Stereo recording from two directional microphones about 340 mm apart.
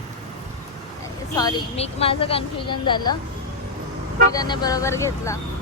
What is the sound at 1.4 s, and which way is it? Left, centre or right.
Speech, centre.